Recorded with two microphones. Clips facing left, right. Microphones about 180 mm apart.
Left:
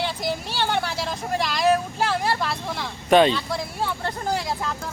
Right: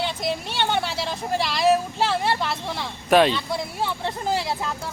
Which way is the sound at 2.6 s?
Centre (ahead or behind).